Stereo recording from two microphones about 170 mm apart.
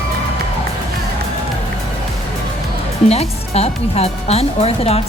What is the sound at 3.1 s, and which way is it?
A woman's voice, 40° left (ahead or behind).